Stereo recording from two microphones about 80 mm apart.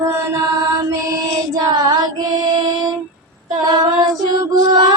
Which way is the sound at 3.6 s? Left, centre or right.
Right.